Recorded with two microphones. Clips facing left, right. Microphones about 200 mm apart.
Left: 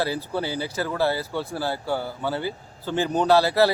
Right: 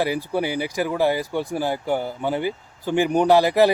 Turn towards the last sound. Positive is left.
turn(degrees=-15)  # may be behind; listen again after turning